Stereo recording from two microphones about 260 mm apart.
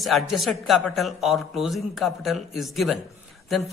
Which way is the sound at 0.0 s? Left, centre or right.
Centre.